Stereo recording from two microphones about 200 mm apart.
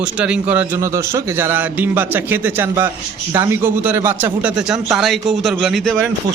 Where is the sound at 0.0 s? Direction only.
5° right (ahead or behind).